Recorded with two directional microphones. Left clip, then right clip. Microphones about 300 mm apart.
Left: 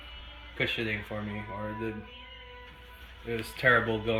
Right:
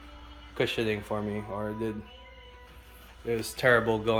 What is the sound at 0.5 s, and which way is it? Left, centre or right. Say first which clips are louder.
Speech: right 2 dB; centre.